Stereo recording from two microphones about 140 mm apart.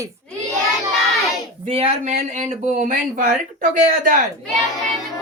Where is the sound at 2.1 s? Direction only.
60° right (ahead or behind).